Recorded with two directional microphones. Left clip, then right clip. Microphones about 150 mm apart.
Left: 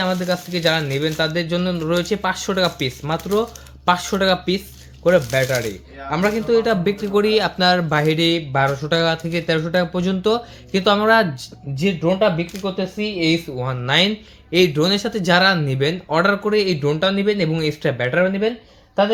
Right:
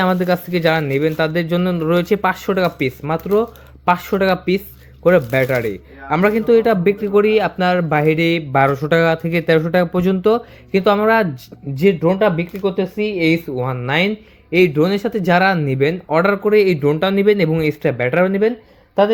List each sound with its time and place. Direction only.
0.0 s speech: 70° right (ahead or behind); by 4.6 s 40° right (ahead or behind)
5.0 s speech: 50° right (ahead or behind)
6.8 s speech: 30° right (ahead or behind)
8.5 s speech: 65° right (ahead or behind)
9.0 s speech: 45° right (ahead or behind)
11.7 s speech: 85° right
13.6 s speech: 40° right (ahead or behind); by 18.5 s 85° right